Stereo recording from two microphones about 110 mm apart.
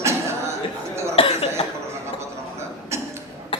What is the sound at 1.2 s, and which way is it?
Cough, 60° left (ahead or behind).